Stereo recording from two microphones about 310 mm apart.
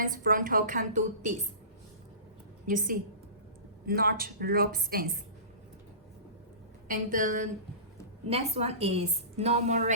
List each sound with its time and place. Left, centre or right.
0.0 s a woman's voice: right
2.6 s a woman's voice: right
6.8 s a woman's voice: right